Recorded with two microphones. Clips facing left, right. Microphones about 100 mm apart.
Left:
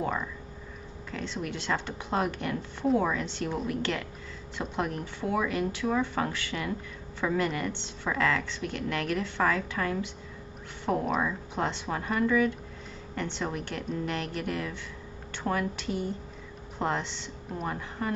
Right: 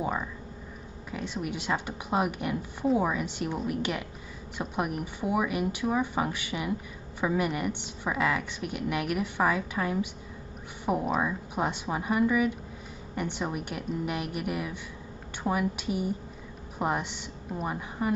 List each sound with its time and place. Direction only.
0.0 s a woman's voice: 10° right (ahead or behind)